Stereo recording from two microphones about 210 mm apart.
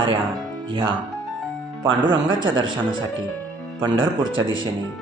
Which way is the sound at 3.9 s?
70° right (ahead or behind).